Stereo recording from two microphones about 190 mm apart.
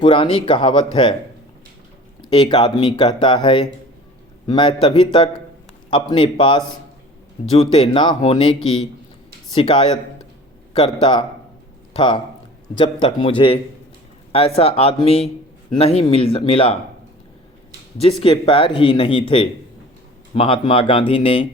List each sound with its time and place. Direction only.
0.0 s speech: 25° left (ahead or behind)
2.3 s speech: 25° left (ahead or behind)
9.6 s speech: 25° left (ahead or behind)
18.2 s speech: 30° left (ahead or behind)